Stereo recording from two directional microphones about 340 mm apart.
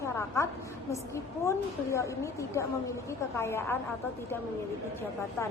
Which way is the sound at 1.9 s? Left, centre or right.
Centre.